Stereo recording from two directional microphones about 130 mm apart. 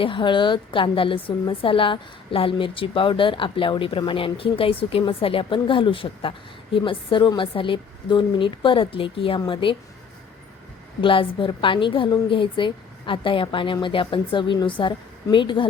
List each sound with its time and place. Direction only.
0.0 s a woman's voice: 40° left (ahead or behind)
11.0 s a woman's voice: 40° left (ahead or behind)